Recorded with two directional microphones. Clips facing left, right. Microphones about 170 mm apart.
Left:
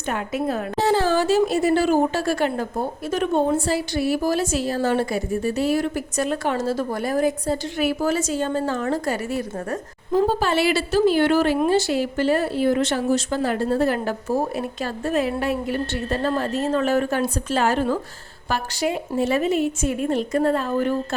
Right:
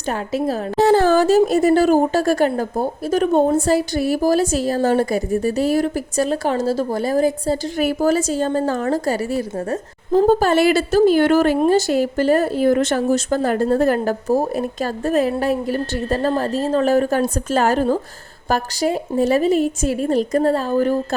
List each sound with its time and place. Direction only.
0.1 s a woman's voice: 35° right (ahead or behind)
0.8 s a woman's voice: 50° right (ahead or behind); by 10.2 s 35° right (ahead or behind)
10.2 s a woman's voice: 45° right (ahead or behind)